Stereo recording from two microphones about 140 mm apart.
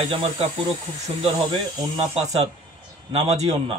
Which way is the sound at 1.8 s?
30° right (ahead or behind).